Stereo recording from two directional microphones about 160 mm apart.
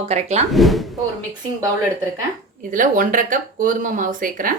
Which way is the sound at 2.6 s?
55° right (ahead or behind).